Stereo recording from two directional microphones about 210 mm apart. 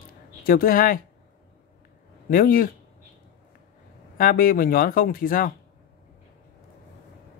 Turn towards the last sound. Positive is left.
turn(degrees=40)  # may be behind; listen again after turning